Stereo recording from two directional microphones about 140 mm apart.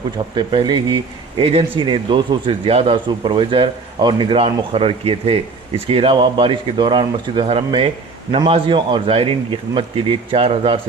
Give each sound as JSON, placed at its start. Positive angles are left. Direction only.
{"t": 0.3, "sound": "speech", "side_deg": -35}